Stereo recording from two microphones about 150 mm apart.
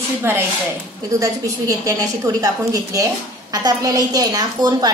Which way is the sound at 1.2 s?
25° right (ahead or behind).